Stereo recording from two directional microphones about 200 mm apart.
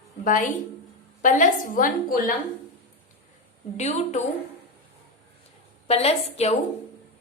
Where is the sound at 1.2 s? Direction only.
40° left (ahead or behind).